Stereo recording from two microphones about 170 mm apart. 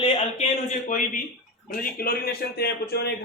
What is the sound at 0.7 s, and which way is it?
Speech, 50° left (ahead or behind).